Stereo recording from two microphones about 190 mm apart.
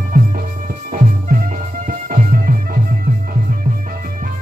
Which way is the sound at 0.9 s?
50° right (ahead or behind).